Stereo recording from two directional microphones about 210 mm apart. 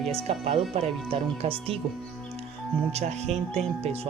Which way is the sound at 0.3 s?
25° right (ahead or behind).